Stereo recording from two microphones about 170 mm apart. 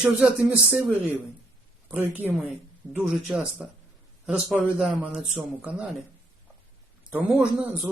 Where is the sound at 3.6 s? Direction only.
Centre (ahead or behind).